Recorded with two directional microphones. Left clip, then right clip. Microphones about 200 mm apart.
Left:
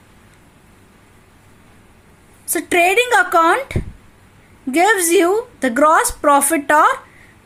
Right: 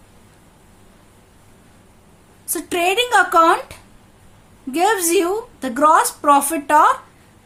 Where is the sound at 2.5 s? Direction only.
25° left (ahead or behind).